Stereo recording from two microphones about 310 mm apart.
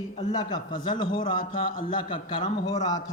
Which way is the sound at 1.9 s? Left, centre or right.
Centre.